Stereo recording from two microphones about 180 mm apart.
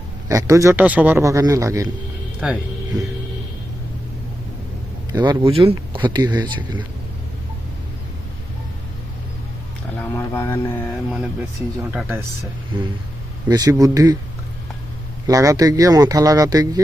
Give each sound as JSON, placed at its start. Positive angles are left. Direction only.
{"t": 0.3, "sound": "a man's voice", "side_deg": -20}
{"t": 2.4, "sound": "speech", "side_deg": -5}
{"t": 5.1, "sound": "speech", "side_deg": -25}
{"t": 10.0, "sound": "speech", "side_deg": 15}
{"t": 11.1, "sound": "a man's voice", "side_deg": -5}
{"t": 12.7, "sound": "speech", "side_deg": -25}
{"t": 15.3, "sound": "speech", "side_deg": -20}